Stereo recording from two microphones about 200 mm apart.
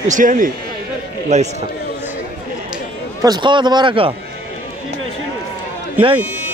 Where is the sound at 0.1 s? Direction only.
40° right (ahead or behind).